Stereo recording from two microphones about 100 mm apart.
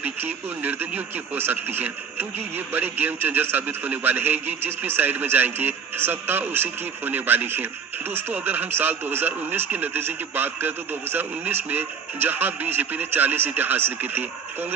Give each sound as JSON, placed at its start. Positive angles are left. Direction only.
{"t": 0.0, "sound": "speech", "side_deg": -20}